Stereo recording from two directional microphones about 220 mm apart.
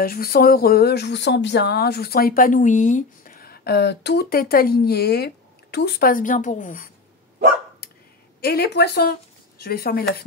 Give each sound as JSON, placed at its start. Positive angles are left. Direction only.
{"t": 0.0, "sound": "speech", "side_deg": 45}
{"t": 8.4, "sound": "speech", "side_deg": 45}